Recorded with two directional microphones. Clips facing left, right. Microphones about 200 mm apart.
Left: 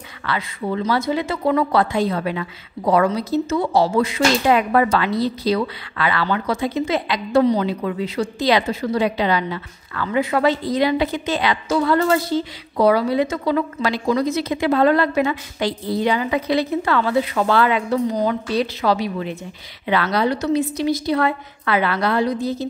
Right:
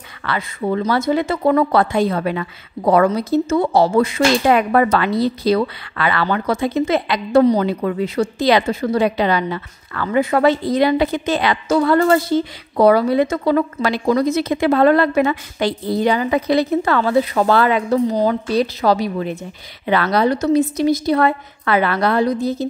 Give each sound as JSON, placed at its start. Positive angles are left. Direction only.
{"t": 0.2, "sound": "a woman's voice", "side_deg": -50}